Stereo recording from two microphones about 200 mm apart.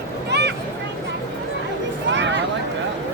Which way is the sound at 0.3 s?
55° right (ahead or behind).